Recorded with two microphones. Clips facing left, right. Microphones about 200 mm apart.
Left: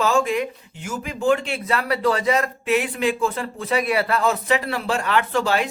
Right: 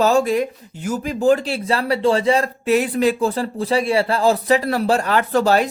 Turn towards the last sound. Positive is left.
turn(degrees=-40)  # may be behind; listen again after turning